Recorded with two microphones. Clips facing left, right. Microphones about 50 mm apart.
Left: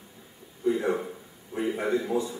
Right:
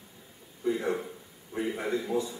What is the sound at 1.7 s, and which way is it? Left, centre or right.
Speech, left.